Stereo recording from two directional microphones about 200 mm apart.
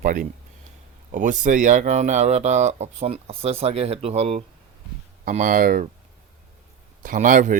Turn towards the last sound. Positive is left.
turn(degrees=-40)  # may be behind; listen again after turning